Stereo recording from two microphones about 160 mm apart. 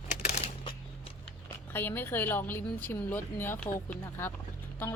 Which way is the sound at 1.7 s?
15° left (ahead or behind).